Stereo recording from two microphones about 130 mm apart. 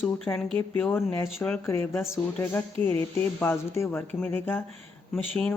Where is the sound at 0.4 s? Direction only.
45° right (ahead or behind).